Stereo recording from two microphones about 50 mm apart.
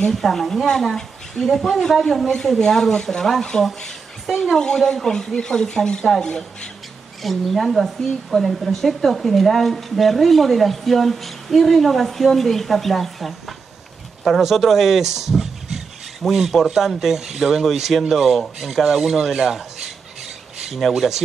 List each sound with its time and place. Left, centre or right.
0.1 s a woman's voice: centre
7.2 s a woman's voice: centre
20.7 s speech: centre